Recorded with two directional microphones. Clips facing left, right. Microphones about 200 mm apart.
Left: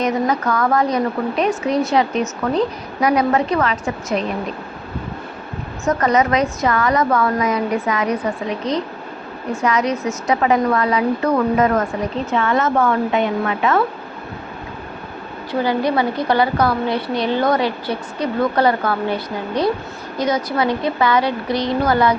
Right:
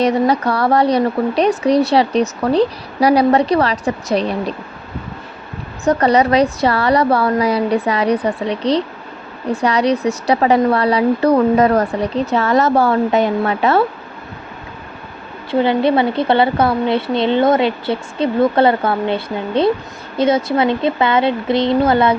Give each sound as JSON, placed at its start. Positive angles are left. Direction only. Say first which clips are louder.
{"t": 0.0, "sound": "speech", "louder": "right 4 dB", "side_deg": -35}
{"t": 5.8, "sound": "speech", "louder": "right 3 dB", "side_deg": -35}
{"t": 15.5, "sound": "a woman's voice", "louder": "right 4 dB", "side_deg": -25}